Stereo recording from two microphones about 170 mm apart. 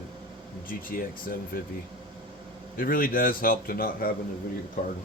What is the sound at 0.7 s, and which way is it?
Speech, 55° left (ahead or behind).